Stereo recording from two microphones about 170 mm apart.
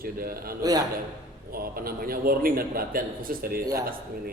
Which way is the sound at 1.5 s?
60° right (ahead or behind).